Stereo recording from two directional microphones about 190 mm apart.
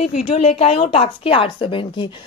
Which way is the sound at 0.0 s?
35° left (ahead or behind).